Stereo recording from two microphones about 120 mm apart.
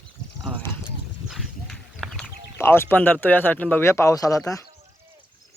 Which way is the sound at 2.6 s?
20° left (ahead or behind).